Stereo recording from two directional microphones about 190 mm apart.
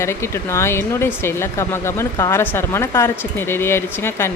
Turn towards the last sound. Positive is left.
turn(degrees=10)  # may be behind; listen again after turning